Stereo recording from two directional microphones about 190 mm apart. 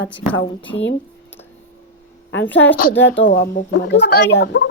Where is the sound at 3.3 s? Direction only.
45° left (ahead or behind).